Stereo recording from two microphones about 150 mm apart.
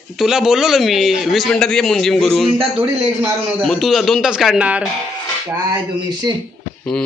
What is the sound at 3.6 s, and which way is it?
Speech, centre (ahead or behind).